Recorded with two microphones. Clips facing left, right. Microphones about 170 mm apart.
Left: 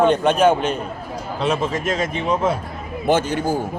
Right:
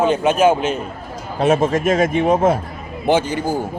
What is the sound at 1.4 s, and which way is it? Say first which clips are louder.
A man's voice: right 6 dB; 50° right (ahead or behind).